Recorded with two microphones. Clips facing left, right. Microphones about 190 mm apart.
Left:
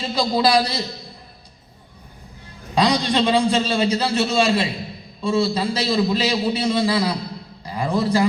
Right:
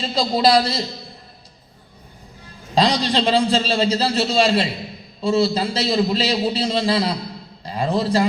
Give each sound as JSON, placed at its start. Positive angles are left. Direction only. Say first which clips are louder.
{"t": 0.0, "sound": "a man's voice", "louder": "right 1 dB", "side_deg": -25}
{"t": 2.7, "sound": "a man's voice", "louder": "even", "side_deg": -30}